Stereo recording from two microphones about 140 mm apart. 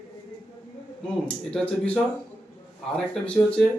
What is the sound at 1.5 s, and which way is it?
Speech, 5° left (ahead or behind).